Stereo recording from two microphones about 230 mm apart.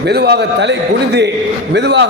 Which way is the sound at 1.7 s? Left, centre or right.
Right.